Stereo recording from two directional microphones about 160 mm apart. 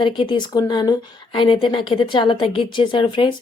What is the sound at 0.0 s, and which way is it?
A woman's voice, 30° left (ahead or behind).